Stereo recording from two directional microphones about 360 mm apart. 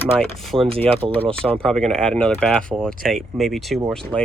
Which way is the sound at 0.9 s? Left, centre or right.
Centre.